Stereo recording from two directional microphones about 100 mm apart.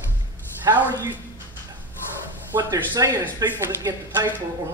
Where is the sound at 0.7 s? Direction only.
45° right (ahead or behind).